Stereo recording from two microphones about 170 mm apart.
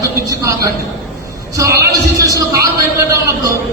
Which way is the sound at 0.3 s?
20° right (ahead or behind).